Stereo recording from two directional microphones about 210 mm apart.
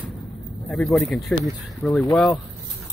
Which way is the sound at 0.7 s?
Centre (ahead or behind).